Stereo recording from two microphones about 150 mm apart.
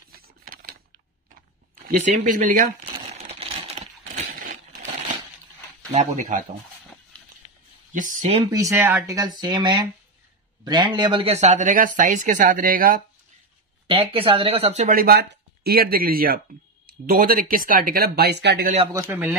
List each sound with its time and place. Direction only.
0.1 s a sound: 80° right
1.9 s speech: 55° right (ahead or behind)
3.1 s crushing: 45° right (ahead or behind)
5.9 s speech: 60° right (ahead or behind)
7.9 s speech: 60° right (ahead or behind)
8.5 s speech: 20° right (ahead or behind); by 13.0 s 70° right (ahead or behind)
13.8 s speech: 35° right (ahead or behind); by 18.7 s 90° right
18.9 s a man's voice: 15° right (ahead or behind)